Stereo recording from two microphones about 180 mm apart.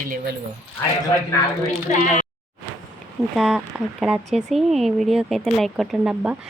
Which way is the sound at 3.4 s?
Centre (ahead or behind).